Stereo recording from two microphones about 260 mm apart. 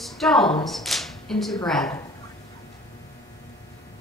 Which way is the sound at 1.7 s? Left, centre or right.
Centre.